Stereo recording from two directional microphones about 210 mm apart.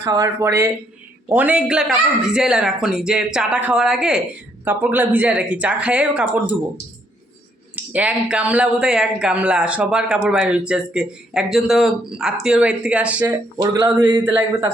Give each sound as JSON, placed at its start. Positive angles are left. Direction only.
{"t": 0.0, "sound": "speech", "side_deg": -15}
{"t": 7.9, "sound": "a man's voice", "side_deg": -5}